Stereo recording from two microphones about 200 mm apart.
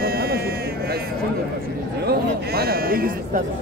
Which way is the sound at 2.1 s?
50° right (ahead or behind).